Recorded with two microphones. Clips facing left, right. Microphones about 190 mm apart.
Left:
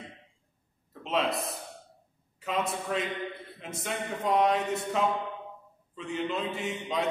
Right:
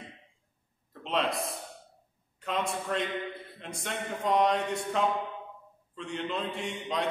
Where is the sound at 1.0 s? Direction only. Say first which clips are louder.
Left 1 dB; centre (ahead or behind).